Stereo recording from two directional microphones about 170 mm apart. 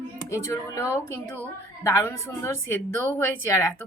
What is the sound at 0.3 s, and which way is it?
A woman's voice, 15° left (ahead or behind).